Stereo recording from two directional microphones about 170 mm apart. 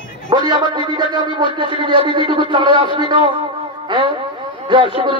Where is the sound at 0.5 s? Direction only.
25° right (ahead or behind).